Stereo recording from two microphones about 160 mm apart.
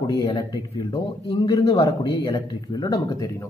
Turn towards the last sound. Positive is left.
turn(degrees=20)  # may be behind; listen again after turning